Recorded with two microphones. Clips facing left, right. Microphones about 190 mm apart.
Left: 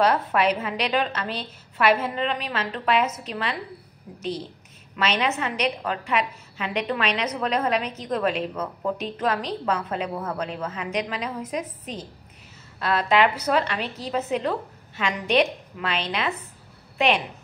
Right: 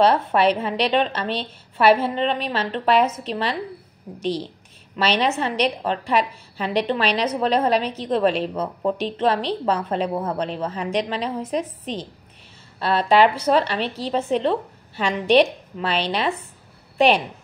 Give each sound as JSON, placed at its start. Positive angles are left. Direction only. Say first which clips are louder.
{"t": 0.0, "sound": "a woman's voice", "louder": "right 4 dB", "side_deg": -30}
{"t": 12.7, "sound": "a woman's voice", "louder": "right 4 dB", "side_deg": -30}